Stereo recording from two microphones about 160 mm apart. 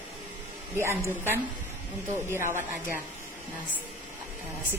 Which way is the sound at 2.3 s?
15° right (ahead or behind).